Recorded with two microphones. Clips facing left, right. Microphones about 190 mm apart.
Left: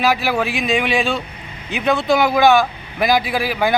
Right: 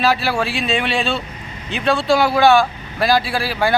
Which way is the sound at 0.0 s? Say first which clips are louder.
Even; 15° left (ahead or behind).